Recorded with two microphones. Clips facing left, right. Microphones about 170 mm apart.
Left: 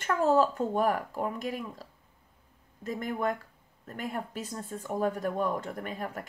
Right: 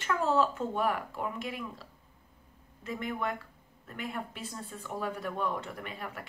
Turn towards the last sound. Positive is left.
turn(degrees=45)  # may be behind; listen again after turning